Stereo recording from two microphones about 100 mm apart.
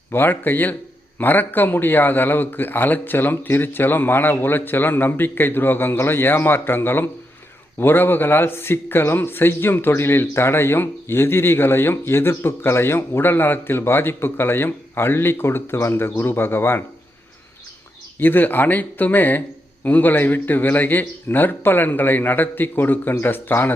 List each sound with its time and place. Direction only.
0.1 s a man's voice: 20° left (ahead or behind)
18.2 s a man's voice: 20° left (ahead or behind)